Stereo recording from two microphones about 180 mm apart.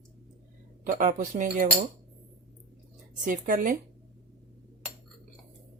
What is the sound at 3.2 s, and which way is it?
Speech, 50° right (ahead or behind).